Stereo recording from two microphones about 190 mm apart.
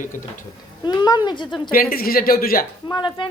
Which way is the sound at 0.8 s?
25° left (ahead or behind).